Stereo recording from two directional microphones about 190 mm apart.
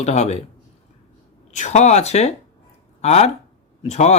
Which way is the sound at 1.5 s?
35° left (ahead or behind).